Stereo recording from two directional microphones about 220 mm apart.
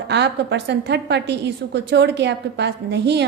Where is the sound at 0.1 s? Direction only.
50° right (ahead or behind).